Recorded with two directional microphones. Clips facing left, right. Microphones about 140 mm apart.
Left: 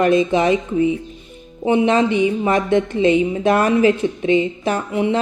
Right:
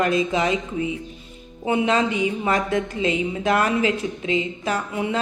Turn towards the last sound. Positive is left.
turn(degrees=30)  # may be behind; listen again after turning